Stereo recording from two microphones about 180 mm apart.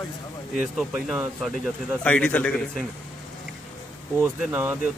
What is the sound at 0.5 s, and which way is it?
Speech, 5° right (ahead or behind).